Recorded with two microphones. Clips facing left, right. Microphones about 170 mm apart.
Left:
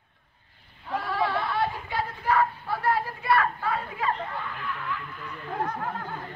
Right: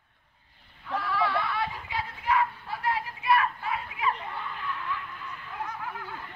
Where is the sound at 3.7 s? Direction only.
35° left (ahead or behind).